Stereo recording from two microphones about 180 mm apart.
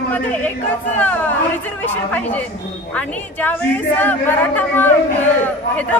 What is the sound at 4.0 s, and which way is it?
A man's voice, 10° left (ahead or behind).